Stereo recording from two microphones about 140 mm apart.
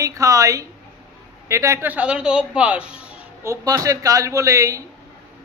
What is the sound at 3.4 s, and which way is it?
Speech, 20° right (ahead or behind).